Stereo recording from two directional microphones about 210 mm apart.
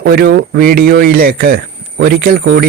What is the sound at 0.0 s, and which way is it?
Speech, 50° right (ahead or behind).